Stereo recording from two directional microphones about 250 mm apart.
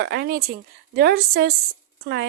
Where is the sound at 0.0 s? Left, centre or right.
Right.